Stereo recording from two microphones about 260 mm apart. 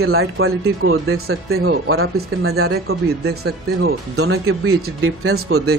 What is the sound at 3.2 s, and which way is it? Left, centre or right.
Speech, right.